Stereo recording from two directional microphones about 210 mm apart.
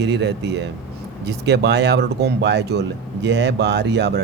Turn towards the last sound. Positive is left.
turn(degrees=-55)  # may be behind; listen again after turning